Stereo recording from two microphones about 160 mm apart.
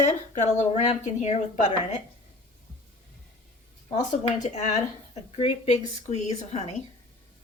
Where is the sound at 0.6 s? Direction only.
45° left (ahead or behind).